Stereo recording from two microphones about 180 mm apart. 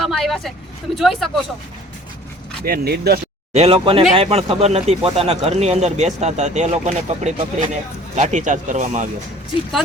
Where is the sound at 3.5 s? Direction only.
35° right (ahead or behind).